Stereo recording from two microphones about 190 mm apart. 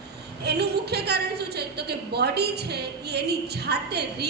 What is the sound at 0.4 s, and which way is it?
A woman's voice, 60° right (ahead or behind).